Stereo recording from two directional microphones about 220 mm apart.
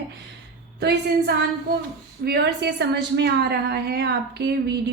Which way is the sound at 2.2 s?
50° right (ahead or behind).